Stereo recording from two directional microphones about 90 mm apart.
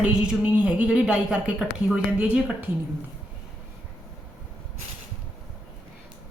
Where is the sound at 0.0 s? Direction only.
10° right (ahead or behind).